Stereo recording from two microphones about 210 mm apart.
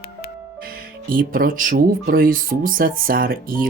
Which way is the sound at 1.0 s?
45° right (ahead or behind).